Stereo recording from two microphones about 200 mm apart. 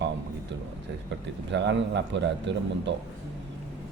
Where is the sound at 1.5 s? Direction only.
60° right (ahead or behind).